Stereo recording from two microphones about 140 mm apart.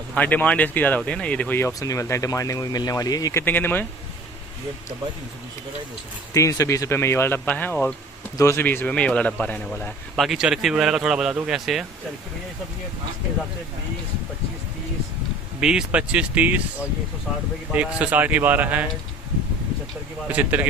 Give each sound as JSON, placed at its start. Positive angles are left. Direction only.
{"t": 0.1, "sound": "speech", "side_deg": 10}
{"t": 1.7, "sound": "speech", "side_deg": 25}
{"t": 3.4, "sound": "speech", "side_deg": 15}
{"t": 6.3, "sound": "speech", "side_deg": 25}
{"t": 15.6, "sound": "speech", "side_deg": -5}
{"t": 17.7, "sound": "speech", "side_deg": -10}
{"t": 20.2, "sound": "speech", "side_deg": -10}